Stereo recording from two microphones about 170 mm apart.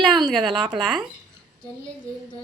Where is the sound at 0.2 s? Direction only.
5° right (ahead or behind).